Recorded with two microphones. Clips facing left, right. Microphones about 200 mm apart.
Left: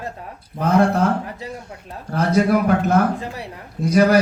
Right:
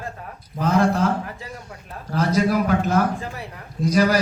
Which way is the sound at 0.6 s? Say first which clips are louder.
Left 2 dB; 60° left (ahead or behind).